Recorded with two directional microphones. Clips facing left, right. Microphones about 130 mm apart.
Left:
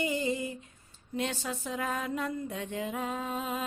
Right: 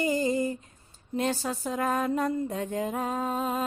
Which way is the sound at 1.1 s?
40° right (ahead or behind).